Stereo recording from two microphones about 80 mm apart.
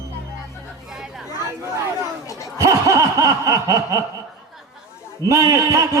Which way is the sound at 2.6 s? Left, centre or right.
Right.